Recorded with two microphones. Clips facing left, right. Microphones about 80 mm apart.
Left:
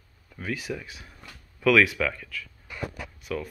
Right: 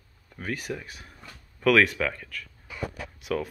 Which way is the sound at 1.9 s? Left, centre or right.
Right.